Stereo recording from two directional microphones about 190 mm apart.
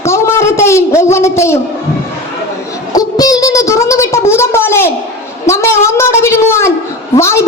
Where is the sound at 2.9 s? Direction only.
20° left (ahead or behind).